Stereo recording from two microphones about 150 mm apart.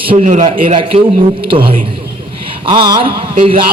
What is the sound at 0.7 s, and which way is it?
Speech, 40° right (ahead or behind).